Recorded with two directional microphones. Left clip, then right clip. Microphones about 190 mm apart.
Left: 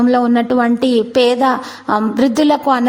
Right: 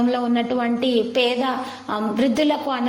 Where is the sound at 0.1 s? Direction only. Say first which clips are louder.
Left 8 dB; 45° left (ahead or behind).